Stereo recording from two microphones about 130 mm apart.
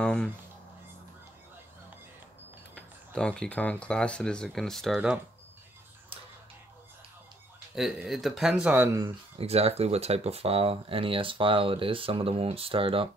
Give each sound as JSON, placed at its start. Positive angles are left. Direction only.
{"t": 0.0, "sound": "speech", "side_deg": 10}
{"t": 2.7, "sound": "speech", "side_deg": 5}
{"t": 7.7, "sound": "speech", "side_deg": 0}
{"t": 9.4, "sound": "speech", "side_deg": -50}